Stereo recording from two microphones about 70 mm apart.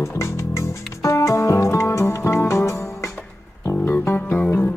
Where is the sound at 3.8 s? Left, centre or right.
Left.